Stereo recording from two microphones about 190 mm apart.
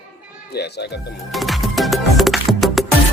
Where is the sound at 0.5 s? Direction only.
60° left (ahead or behind).